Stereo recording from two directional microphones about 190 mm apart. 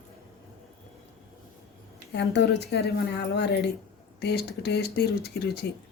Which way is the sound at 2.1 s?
65° left (ahead or behind).